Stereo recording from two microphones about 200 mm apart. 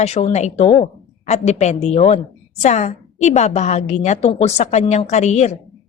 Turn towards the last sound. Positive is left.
turn(degrees=35)  # may be behind; listen again after turning